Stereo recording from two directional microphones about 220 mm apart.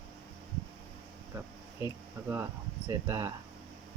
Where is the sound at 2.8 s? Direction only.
15° right (ahead or behind).